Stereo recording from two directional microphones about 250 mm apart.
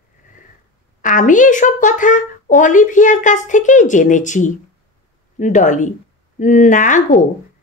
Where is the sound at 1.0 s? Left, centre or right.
Left.